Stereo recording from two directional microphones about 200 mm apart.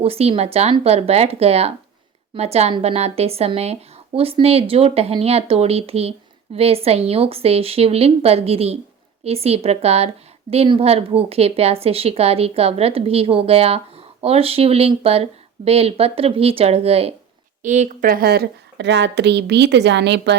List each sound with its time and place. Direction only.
0.0 s a woman's voice: 30° right (ahead or behind); by 20.3 s 60° right (ahead or behind)